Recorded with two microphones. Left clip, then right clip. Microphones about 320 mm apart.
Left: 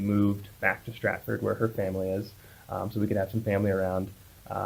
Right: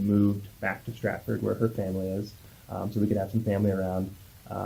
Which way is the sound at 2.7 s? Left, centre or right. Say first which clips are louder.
Even; left.